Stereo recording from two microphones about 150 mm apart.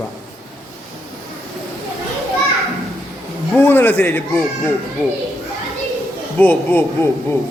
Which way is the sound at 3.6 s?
15° left (ahead or behind).